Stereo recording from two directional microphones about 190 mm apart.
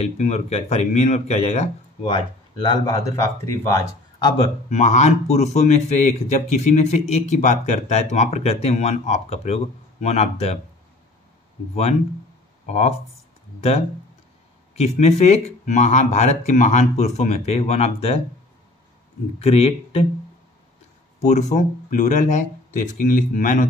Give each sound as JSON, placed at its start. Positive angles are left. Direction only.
{"t": 0.0, "sound": "speech", "side_deg": 35}
{"t": 4.6, "sound": "speech", "side_deg": 35}
{"t": 12.6, "sound": "speech", "side_deg": 35}
{"t": 19.4, "sound": "speech", "side_deg": 30}
{"t": 21.2, "sound": "speech", "side_deg": 35}